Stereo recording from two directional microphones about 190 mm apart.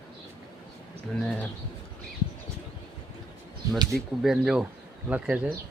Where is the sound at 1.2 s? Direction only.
5° left (ahead or behind).